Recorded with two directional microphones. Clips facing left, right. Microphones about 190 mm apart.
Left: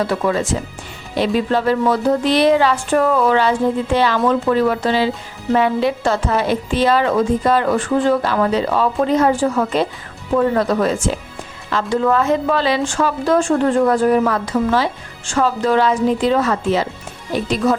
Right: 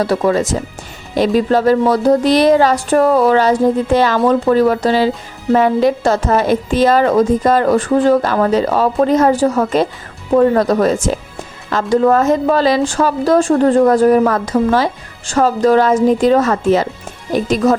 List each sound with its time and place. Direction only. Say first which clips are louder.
0.0 s a woman's voice: right 4 dB; 40° right (ahead or behind)